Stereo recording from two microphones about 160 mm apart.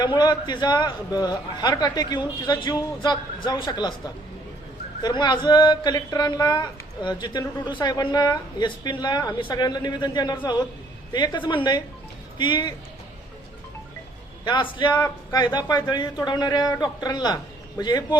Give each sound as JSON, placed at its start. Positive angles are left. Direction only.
{"t": 0.0, "sound": "speech", "side_deg": 25}
{"t": 5.0, "sound": "speech", "side_deg": 25}
{"t": 14.4, "sound": "speech", "side_deg": 30}